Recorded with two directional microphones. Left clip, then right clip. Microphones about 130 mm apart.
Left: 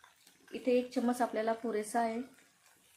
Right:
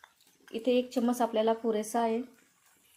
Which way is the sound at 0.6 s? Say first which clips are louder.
Right 3 dB; 40° right (ahead or behind).